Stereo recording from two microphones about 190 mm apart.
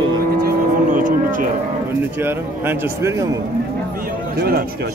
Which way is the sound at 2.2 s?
10° right (ahead or behind).